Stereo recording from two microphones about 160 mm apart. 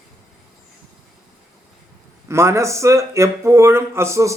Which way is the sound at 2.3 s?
15° right (ahead or behind).